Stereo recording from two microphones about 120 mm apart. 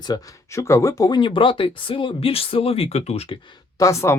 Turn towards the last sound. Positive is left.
turn(degrees=25)  # may be behind; listen again after turning